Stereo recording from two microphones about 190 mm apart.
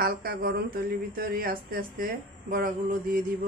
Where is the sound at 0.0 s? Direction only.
50° right (ahead or behind).